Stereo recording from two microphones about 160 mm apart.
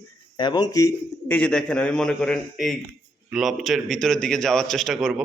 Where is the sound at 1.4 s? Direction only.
5° left (ahead or behind).